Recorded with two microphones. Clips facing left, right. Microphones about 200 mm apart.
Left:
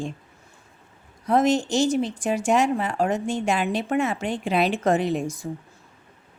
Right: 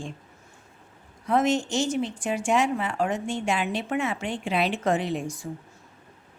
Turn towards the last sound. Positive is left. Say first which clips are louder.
# left 4 dB
turn(degrees=45)  # may be behind; listen again after turning